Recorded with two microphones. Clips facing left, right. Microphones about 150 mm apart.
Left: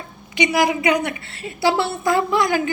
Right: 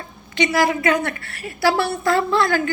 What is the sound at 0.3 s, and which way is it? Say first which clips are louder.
A woman's voice: even; 20° left (ahead or behind).